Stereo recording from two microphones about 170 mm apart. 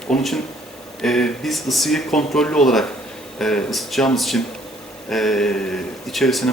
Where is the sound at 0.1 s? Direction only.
Centre (ahead or behind).